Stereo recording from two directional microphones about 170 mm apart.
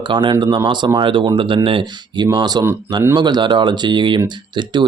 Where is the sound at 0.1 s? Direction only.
30° right (ahead or behind).